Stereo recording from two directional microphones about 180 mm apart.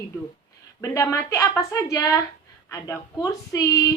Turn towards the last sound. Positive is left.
turn(degrees=20)  # may be behind; listen again after turning